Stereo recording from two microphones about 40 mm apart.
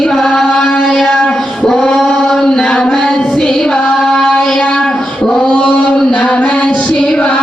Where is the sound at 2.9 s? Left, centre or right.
Centre.